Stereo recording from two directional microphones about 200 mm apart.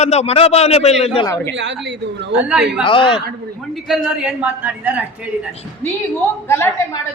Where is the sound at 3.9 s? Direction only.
5° right (ahead or behind).